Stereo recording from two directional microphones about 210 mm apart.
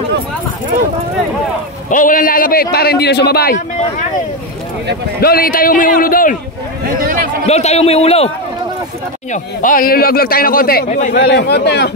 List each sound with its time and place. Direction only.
1.9 s a man's voice: 40° left (ahead or behind)
5.2 s a man's voice: 45° left (ahead or behind)
7.0 s a sound: 45° right (ahead or behind)
7.4 s a man's voice: 30° left (ahead or behind)
9.3 s a man's voice: 40° left (ahead or behind)